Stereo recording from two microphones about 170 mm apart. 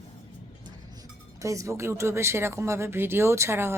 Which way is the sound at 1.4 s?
20° right (ahead or behind).